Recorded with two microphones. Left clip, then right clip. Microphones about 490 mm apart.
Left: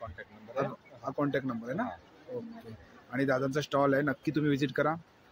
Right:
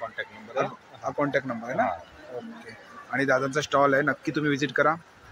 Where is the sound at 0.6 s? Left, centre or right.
Left.